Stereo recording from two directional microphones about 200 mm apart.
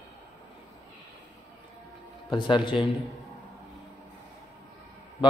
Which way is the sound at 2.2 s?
25° left (ahead or behind).